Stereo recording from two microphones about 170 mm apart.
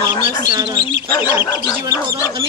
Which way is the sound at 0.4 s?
25° right (ahead or behind).